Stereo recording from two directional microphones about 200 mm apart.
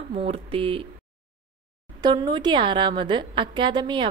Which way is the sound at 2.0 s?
20° right (ahead or behind).